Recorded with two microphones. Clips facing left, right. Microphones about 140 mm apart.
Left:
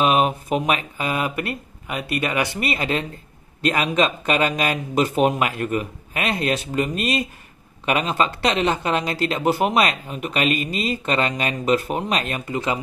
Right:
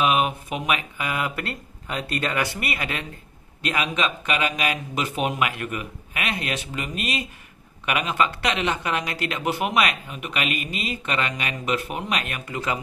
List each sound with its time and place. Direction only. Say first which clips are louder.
0.0 s speech: left 3 dB; 35° left (ahead or behind)